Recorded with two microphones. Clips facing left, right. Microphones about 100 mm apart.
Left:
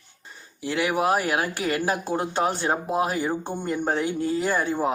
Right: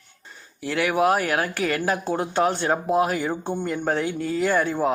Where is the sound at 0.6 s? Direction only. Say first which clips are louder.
Right 2 dB; 25° left (ahead or behind).